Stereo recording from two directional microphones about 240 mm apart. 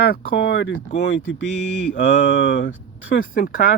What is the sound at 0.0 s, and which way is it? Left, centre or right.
Speech, left.